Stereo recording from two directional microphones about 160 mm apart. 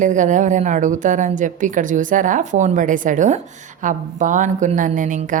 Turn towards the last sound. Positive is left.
turn(degrees=-55)  # may be behind; listen again after turning